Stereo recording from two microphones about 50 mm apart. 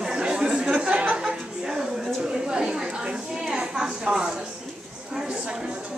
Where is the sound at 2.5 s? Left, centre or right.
Centre.